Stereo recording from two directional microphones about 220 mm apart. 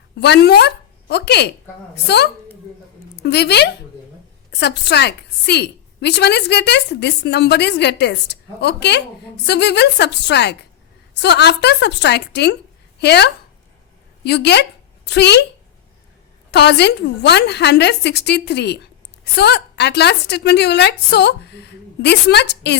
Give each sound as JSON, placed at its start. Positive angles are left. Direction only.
{"t": 0.2, "sound": "a woman's voice", "side_deg": 50}
{"t": 16.5, "sound": "a woman's voice", "side_deg": 50}